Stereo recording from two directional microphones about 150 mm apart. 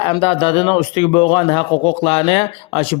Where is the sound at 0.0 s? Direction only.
35° left (ahead or behind).